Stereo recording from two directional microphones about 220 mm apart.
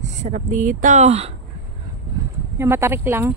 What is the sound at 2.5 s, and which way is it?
Speech, 10° right (ahead or behind).